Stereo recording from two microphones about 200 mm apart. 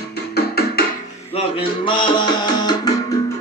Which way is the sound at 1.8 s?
25° left (ahead or behind).